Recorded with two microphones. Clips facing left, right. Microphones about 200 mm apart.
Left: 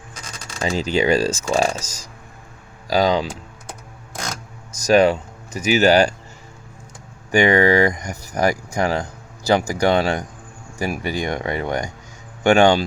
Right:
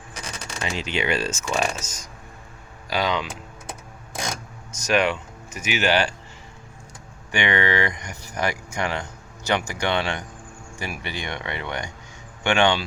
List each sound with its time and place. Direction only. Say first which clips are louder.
0.6 s speech: left 8 dB; 40° left (ahead or behind)
4.7 s speech: left 7 dB; 35° left (ahead or behind)
7.3 s speech: left 8 dB; 40° left (ahead or behind)